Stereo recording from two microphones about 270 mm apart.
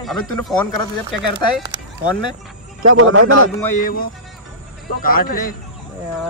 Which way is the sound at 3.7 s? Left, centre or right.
Left.